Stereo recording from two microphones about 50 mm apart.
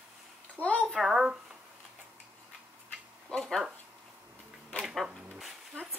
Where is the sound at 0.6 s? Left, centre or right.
Right.